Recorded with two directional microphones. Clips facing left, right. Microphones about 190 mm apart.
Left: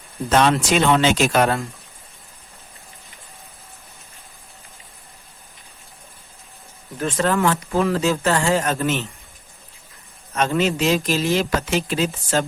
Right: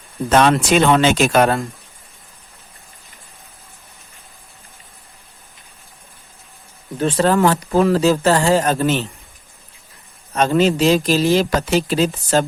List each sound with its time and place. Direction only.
0.3 s speech: 55° right (ahead or behind)
6.9 s speech: 30° right (ahead or behind)
10.3 s speech: 35° right (ahead or behind)